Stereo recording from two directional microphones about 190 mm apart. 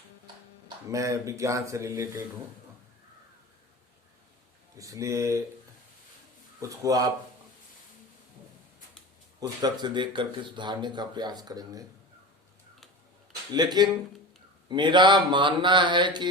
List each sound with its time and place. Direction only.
0.9 s speech: 15° right (ahead or behind)
4.8 s speech: 15° right (ahead or behind)
6.6 s speech: 20° right (ahead or behind)
9.4 s speech: 20° right (ahead or behind)
13.5 s speech: 20° right (ahead or behind)